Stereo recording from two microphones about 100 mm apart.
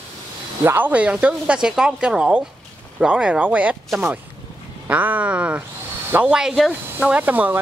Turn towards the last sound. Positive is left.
turn(degrees=-20)  # may be behind; listen again after turning